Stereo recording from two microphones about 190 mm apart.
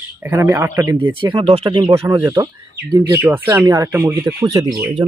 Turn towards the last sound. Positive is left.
turn(degrees=-20)  # may be behind; listen again after turning